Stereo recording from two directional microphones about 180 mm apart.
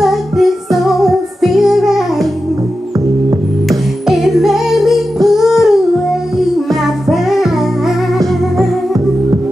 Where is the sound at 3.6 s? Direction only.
Centre (ahead or behind).